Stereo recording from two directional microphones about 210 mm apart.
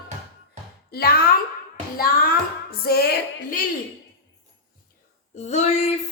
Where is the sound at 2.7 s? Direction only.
45° left (ahead or behind).